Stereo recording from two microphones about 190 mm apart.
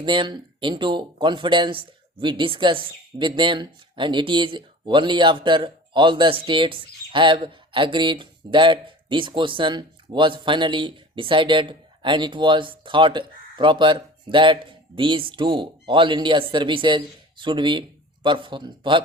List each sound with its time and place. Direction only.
0.0 s speech: 25° right (ahead or behind)